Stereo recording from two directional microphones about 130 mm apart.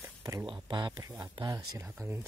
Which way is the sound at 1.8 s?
20° right (ahead or behind).